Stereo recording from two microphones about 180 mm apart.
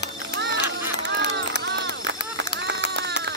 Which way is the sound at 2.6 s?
85° right.